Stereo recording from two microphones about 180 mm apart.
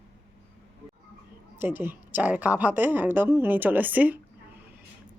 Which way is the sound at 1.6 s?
10° right (ahead or behind).